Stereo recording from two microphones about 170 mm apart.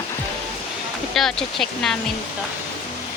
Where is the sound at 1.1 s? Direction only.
Centre (ahead or behind).